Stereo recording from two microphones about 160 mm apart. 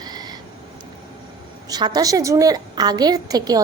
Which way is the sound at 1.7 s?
25° right (ahead or behind).